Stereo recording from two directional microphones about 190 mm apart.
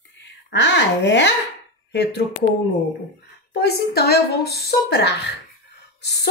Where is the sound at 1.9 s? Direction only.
60° left (ahead or behind).